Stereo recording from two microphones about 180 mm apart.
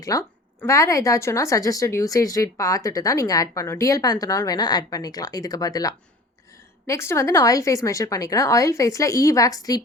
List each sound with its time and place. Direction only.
0.1 s a woman's voice: 20° left (ahead or behind)